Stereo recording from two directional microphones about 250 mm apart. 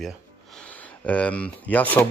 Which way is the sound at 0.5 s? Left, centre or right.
Centre.